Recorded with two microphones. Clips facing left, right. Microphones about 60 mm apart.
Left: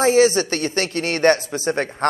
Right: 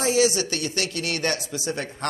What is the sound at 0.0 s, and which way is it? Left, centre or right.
Speech, left.